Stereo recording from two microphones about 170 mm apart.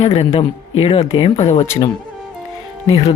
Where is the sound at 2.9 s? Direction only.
35° left (ahead or behind).